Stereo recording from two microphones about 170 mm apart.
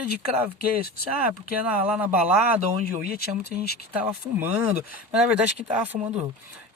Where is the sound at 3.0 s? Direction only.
65° left (ahead or behind).